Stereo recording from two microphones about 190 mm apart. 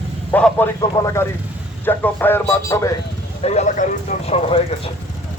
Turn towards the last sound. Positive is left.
turn(degrees=30)  # may be behind; listen again after turning